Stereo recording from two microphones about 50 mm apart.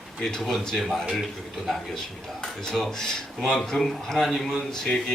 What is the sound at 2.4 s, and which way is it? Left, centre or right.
Speech, centre.